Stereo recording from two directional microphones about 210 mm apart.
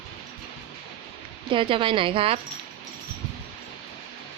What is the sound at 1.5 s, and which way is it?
Speech, 25° right (ahead or behind).